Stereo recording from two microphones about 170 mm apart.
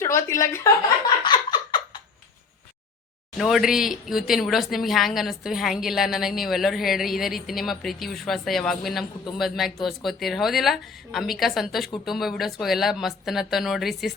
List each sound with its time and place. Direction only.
0.0 s a woman's voice: 20° left (ahead or behind)
1.2 s a sound: 25° left (ahead or behind)
3.3 s speech: centre (ahead or behind)